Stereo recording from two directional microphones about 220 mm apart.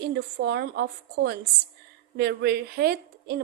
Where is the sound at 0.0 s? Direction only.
45° right (ahead or behind).